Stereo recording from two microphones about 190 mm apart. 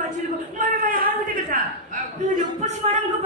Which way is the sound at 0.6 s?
45° right (ahead or behind).